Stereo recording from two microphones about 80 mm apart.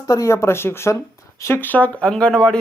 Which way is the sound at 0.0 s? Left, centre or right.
Left.